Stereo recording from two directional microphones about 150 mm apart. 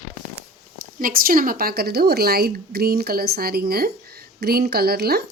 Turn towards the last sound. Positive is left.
turn(degrees=-90)